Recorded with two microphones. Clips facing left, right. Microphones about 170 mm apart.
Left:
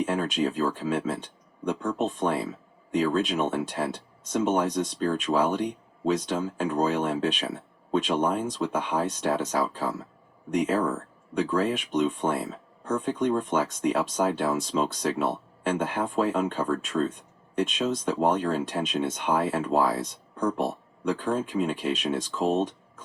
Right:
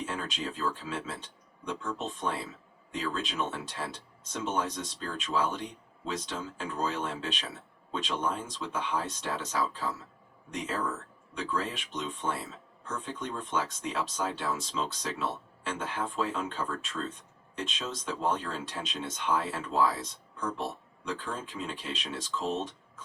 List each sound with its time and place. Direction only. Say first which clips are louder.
0.0 s speech: left 10 dB; 50° left (ahead or behind)